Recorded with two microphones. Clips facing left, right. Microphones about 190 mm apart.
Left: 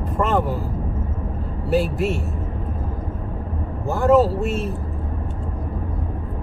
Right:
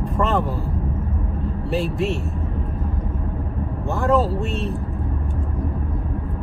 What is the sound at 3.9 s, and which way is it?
Speech, centre (ahead or behind).